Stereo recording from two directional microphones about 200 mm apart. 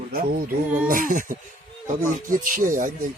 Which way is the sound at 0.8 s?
45° right (ahead or behind).